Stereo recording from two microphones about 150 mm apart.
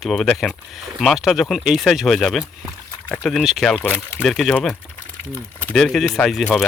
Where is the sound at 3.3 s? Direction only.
Centre (ahead or behind).